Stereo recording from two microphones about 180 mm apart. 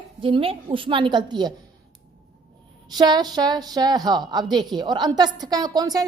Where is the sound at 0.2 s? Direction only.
30° right (ahead or behind).